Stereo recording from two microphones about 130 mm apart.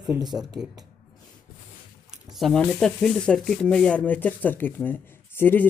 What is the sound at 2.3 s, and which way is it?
Speech, centre (ahead or behind).